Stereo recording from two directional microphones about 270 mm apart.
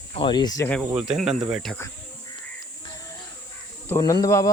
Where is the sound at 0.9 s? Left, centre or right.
Centre.